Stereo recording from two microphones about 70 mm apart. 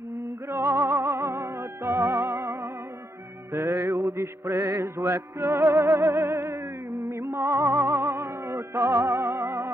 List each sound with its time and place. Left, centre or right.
0.5 s music: right